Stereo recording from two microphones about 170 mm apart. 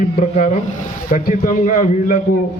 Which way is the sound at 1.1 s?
50° left (ahead or behind).